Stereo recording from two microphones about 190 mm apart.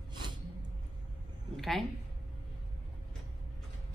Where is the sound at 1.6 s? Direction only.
Centre (ahead or behind).